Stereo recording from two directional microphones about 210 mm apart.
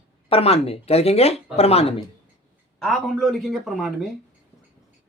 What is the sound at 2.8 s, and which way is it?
Speech, centre (ahead or behind).